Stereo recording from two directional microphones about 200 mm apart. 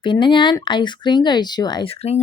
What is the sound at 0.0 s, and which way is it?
Speech, 25° left (ahead or behind).